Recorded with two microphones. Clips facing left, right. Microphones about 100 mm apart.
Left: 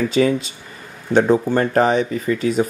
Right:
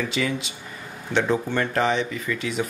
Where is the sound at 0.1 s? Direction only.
40° left (ahead or behind).